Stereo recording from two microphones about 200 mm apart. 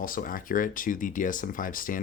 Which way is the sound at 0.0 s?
45° left (ahead or behind).